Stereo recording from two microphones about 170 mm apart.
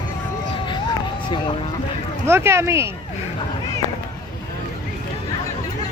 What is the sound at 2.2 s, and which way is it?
Speech, 15° right (ahead or behind).